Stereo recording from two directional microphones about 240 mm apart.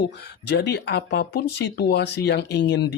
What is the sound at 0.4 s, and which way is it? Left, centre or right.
Speech, left.